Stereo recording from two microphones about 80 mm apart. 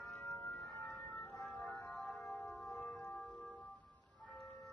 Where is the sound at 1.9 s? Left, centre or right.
Centre.